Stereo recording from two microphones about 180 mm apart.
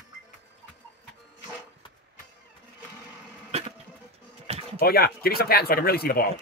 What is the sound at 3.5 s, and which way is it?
Cough, 35° right (ahead or behind).